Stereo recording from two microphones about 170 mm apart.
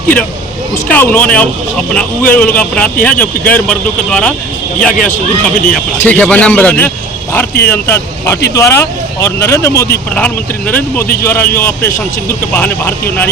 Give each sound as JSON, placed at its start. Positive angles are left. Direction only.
{"t": 0.9, "sound": "speech", "side_deg": 10}